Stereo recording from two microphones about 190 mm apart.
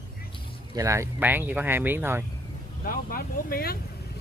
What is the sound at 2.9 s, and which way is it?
Speech, 50° left (ahead or behind).